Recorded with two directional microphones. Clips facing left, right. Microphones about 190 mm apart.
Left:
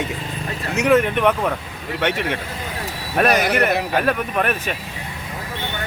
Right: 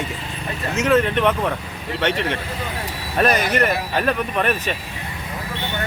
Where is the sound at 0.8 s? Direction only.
10° left (ahead or behind).